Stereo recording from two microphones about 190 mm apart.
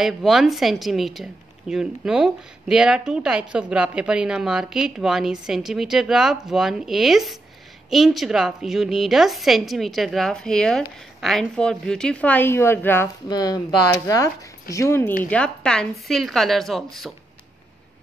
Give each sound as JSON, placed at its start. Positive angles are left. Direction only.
{"t": 0.0, "sound": "speech", "side_deg": 0}